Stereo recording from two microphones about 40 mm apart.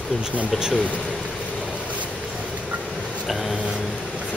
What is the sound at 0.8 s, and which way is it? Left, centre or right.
Speech, left.